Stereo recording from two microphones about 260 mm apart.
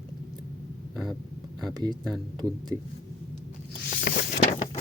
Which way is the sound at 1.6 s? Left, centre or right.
Centre.